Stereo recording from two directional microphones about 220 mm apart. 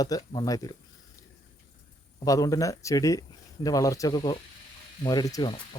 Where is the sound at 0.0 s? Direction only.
15° left (ahead or behind).